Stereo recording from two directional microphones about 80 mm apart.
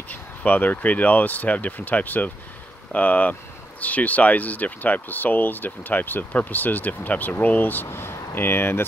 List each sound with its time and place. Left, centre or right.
0.1 s speech: left